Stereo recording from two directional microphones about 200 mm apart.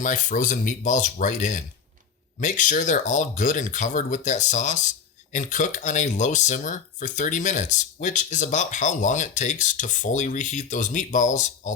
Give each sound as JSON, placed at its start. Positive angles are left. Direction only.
{"t": 0.0, "sound": "speech", "side_deg": 40}